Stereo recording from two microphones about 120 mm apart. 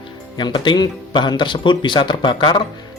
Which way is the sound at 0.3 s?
40° left (ahead or behind).